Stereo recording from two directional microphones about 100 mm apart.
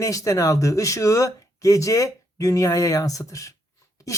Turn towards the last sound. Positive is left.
turn(degrees=35)  # may be behind; listen again after turning